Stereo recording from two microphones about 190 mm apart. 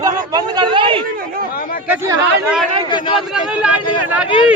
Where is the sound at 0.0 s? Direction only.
20° right (ahead or behind).